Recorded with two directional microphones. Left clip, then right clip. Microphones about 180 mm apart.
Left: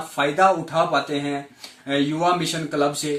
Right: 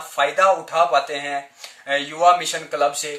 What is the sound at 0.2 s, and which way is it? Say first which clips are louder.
A man's voice: right 1 dB; 15° right (ahead or behind).